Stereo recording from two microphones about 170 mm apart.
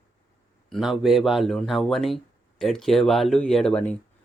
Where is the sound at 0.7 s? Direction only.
Centre (ahead or behind).